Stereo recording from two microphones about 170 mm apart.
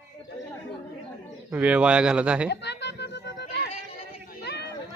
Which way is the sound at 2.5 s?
80° left.